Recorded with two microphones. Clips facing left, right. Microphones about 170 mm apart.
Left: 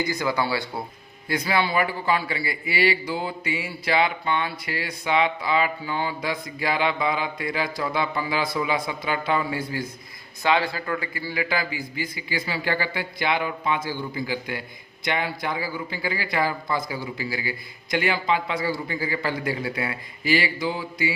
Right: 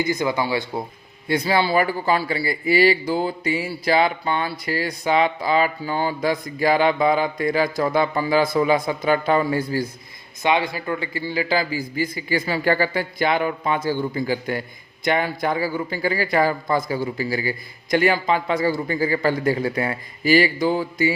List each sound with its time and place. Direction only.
0.0 s speech: 20° right (ahead or behind)
1.3 s a man's voice: 30° right (ahead or behind)
10.4 s a man's voice: 20° right (ahead or behind); by 21.1 s 45° right (ahead or behind)